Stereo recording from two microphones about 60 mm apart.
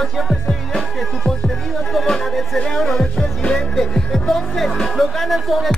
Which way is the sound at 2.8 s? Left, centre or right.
Centre.